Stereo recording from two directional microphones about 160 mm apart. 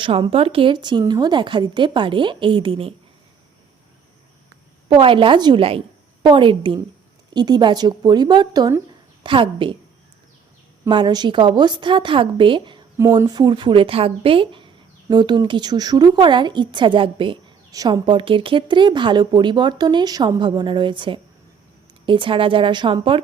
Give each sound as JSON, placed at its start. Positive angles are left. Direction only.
{"t": 0.0, "sound": "a woman's voice", "side_deg": -35}
{"t": 4.9, "sound": "a woman's voice", "side_deg": -35}
{"t": 10.8, "sound": "a woman's voice", "side_deg": -30}